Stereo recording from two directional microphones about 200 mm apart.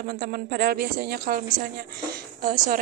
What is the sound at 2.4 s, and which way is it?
Speech, 45° right (ahead or behind).